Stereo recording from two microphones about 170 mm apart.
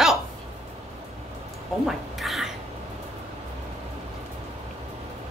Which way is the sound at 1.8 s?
Centre (ahead or behind).